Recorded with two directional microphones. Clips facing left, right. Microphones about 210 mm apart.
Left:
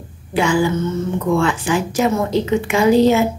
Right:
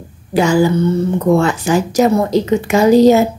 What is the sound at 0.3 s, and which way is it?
A woman's voice, 40° right (ahead or behind).